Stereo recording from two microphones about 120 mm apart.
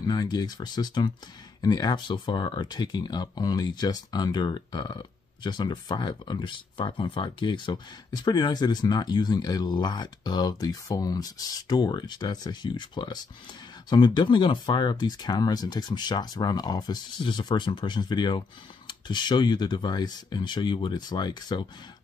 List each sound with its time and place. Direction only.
0.0 s speech: 35° left (ahead or behind)